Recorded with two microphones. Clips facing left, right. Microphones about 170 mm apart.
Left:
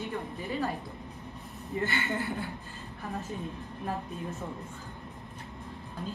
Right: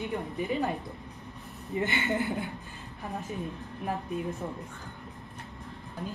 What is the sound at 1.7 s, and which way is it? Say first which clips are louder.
Speech: right 2 dB; 20° right (ahead or behind).